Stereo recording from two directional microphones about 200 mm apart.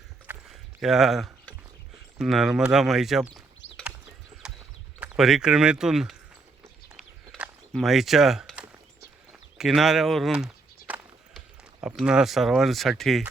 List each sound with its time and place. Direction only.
0.3 s clip-clop: 10° right (ahead or behind)
0.8 s speech: centre (ahead or behind)
3.6 s clip-clop: 65° left (ahead or behind)
4.4 s clip-clop: 5° right (ahead or behind)
4.9 s speech: 5° right (ahead or behind)
6.8 s walk: 5° right (ahead or behind)
9.6 s speech: centre (ahead or behind)
10.8 s a sound: 5° right (ahead or behind)